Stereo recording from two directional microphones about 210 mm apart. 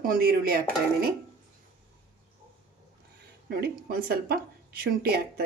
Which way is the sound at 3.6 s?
45° right (ahead or behind).